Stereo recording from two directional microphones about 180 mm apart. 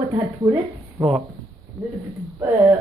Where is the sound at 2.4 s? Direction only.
20° right (ahead or behind).